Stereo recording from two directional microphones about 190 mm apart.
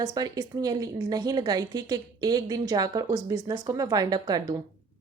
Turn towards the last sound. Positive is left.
turn(degrees=-20)  # may be behind; listen again after turning